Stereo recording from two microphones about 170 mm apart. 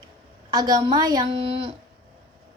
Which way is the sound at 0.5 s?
25° right (ahead or behind).